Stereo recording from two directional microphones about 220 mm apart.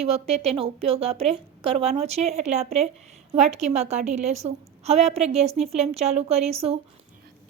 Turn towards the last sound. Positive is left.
turn(degrees=-25)  # may be behind; listen again after turning